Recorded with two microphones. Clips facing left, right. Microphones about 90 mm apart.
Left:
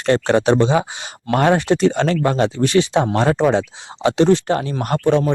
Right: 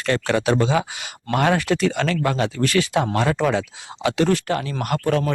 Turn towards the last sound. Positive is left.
turn(degrees=30)  # may be behind; listen again after turning